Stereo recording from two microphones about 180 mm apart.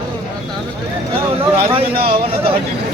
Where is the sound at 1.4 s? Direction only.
30° right (ahead or behind).